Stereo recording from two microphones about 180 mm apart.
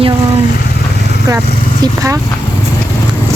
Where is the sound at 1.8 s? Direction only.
20° right (ahead or behind).